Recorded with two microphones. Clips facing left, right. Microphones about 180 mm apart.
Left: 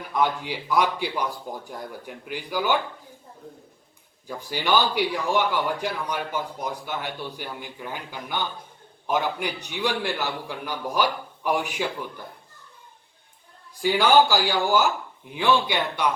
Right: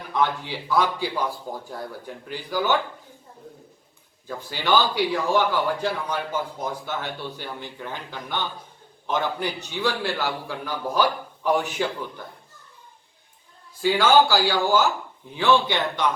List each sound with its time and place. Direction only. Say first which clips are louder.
0.1 s a man's voice: even; 15° left (ahead or behind)
4.3 s a man's voice: right 1 dB; 15° left (ahead or behind)
13.7 s a man's voice: right 1 dB; 15° left (ahead or behind)